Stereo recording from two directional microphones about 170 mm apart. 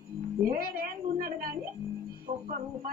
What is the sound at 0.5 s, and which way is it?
Speech, 60° right (ahead or behind).